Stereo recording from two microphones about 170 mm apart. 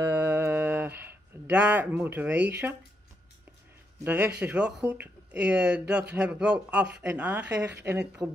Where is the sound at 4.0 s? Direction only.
10° right (ahead or behind).